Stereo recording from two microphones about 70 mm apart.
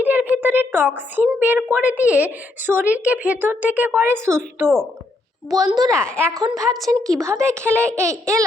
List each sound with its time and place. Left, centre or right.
0.0 s a sound: right
0.4 s a woman's voice: right
4.3 s speech: right
5.5 s a woman's voice: right
6.5 s a woman's voice: centre
7.1 s speech: right